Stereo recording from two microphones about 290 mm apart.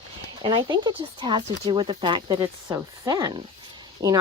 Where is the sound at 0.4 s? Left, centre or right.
Centre.